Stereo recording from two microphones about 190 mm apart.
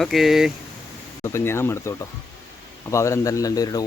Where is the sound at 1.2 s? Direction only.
15° left (ahead or behind).